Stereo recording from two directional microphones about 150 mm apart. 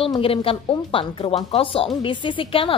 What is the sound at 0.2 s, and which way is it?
A woman's voice, 40° left (ahead or behind).